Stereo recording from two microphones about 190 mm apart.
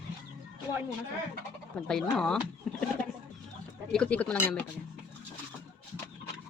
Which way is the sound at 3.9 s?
5° left (ahead or behind).